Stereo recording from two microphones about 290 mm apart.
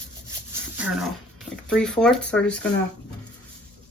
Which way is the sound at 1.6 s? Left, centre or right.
Centre.